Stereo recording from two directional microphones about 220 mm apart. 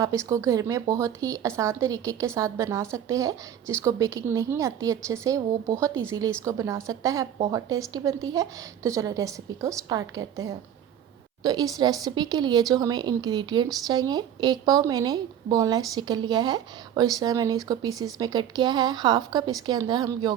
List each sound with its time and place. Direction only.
0.0 s a woman's voice: 15° right (ahead or behind)
11.4 s a woman's voice: 20° right (ahead or behind)